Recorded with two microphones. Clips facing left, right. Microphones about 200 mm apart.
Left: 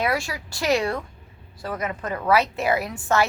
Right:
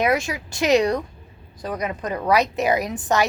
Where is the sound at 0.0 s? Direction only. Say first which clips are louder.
Right 4 dB; 20° right (ahead or behind).